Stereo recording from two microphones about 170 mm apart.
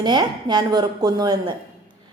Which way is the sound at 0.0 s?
25° right (ahead or behind).